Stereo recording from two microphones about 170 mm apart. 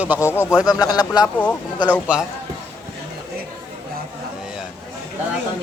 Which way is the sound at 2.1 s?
10° right (ahead or behind).